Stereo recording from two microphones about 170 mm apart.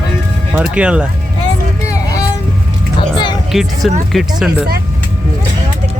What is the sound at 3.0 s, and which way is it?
Music, 25° left (ahead or behind).